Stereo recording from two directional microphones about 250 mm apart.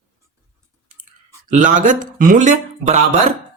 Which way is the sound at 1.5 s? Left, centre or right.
Right.